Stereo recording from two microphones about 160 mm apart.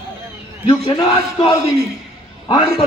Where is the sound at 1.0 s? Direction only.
30° left (ahead or behind).